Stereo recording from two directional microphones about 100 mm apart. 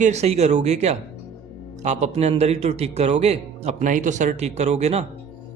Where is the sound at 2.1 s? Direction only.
90° right.